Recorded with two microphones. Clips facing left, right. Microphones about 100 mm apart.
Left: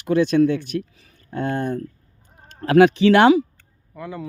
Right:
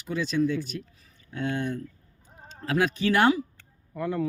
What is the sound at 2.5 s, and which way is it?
Speech, 60° left (ahead or behind).